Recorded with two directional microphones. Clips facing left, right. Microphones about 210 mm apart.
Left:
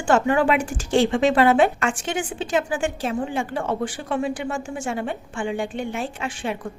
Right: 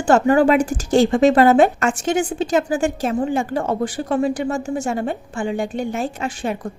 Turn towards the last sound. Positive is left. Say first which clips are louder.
# right 4 dB
turn(degrees=-40)  # may be behind; listen again after turning